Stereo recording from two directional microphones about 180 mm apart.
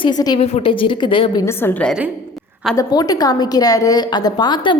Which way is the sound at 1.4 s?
10° left (ahead or behind).